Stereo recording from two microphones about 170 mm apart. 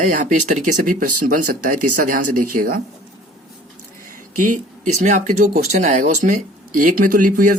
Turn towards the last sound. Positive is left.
turn(degrees=-55)  # may be behind; listen again after turning